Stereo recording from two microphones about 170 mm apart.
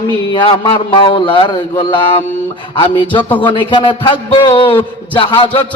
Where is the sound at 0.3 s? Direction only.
30° left (ahead or behind).